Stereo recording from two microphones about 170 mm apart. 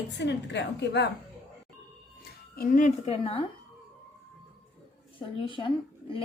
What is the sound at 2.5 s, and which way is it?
Speech, 50° left (ahead or behind).